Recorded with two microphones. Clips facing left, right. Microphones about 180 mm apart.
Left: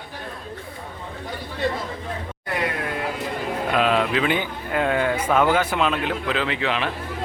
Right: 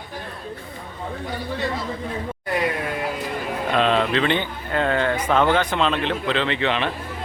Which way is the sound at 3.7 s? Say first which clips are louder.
Right 1 dB; 5° left (ahead or behind).